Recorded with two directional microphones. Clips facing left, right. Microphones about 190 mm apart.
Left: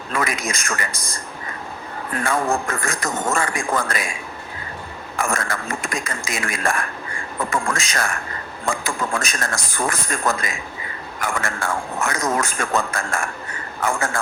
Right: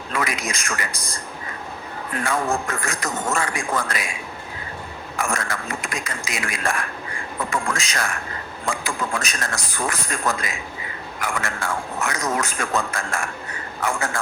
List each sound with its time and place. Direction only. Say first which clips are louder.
0.1 s a man's voice: left 2 dB; 45° left (ahead or behind)
2.2 s a man's voice: left 2 dB; 50° left (ahead or behind)
5.2 s a man's voice: left 2 dB; 50° left (ahead or behind)